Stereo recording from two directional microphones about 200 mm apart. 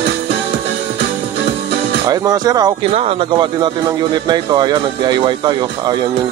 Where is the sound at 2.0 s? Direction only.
20° right (ahead or behind).